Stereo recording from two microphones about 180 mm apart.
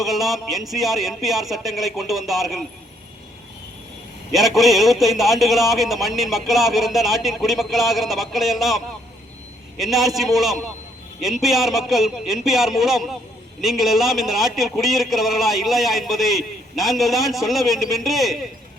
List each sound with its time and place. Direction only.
0.0 s speech: centre (ahead or behind)
4.3 s speech: centre (ahead or behind)